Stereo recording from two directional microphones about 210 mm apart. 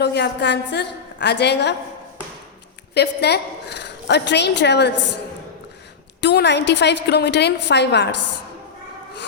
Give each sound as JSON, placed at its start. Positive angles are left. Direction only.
{"t": 0.0, "sound": "a woman's voice", "side_deg": 55}
{"t": 2.9, "sound": "a woman's voice", "side_deg": 50}
{"t": 6.2, "sound": "a woman's voice", "side_deg": 55}